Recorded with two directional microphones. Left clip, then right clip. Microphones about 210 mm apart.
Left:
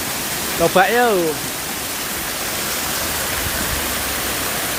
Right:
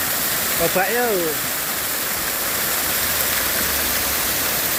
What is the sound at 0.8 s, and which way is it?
Speech, 30° left (ahead or behind).